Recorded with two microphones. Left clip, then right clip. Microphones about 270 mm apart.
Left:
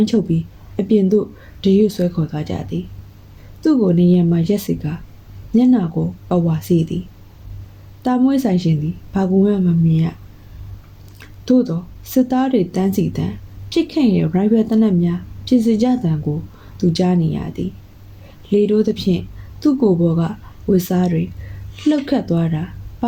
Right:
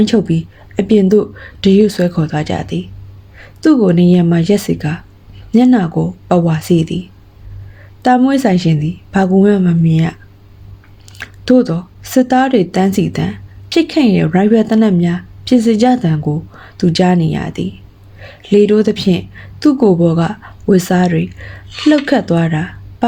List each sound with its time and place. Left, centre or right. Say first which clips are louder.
0.0 s a woman's voice: right 5 dB; right
8.0 s a woman's voice: right 6 dB; right
11.2 s a woman's voice: right 5 dB; right